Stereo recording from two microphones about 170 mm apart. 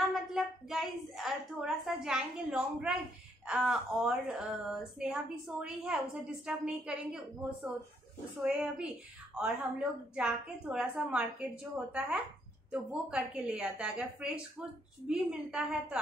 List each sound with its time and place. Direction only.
0.1 s a woman's voice: centre (ahead or behind)